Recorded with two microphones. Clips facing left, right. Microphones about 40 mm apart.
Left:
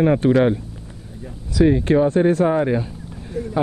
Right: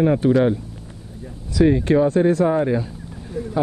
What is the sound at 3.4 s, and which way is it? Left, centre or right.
Speech, left.